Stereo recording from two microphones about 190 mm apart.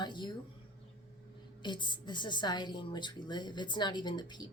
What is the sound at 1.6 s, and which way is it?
A woman's voice, 25° left (ahead or behind).